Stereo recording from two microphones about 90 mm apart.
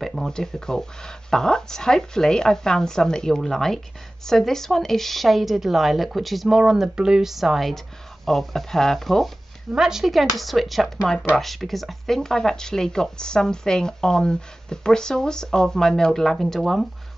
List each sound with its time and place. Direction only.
0.0 s speech: 5° left (ahead or behind)